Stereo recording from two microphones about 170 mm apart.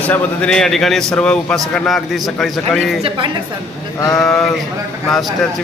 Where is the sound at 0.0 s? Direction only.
10° left (ahead or behind).